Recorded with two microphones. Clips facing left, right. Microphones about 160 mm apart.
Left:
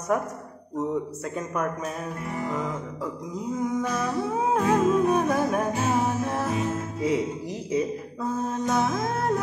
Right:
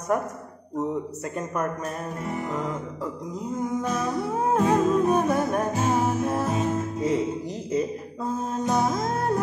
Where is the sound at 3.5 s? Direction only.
Centre (ahead or behind).